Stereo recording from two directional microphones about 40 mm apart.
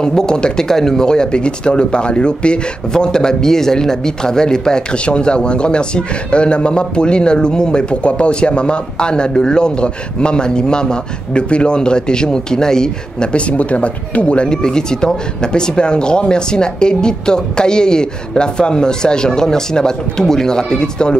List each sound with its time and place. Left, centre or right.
0.0 s speech: centre
13.3 s speech: left